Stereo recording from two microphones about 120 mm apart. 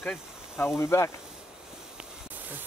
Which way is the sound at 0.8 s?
25° left (ahead or behind).